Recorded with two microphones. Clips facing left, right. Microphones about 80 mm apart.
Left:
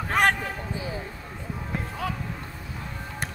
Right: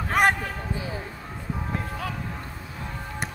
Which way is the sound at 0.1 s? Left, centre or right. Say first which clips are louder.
Right 1 dB; centre.